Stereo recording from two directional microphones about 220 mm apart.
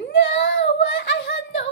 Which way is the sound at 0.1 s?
55° left (ahead or behind).